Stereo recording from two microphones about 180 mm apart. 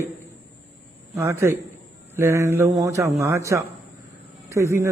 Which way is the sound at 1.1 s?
15° right (ahead or behind).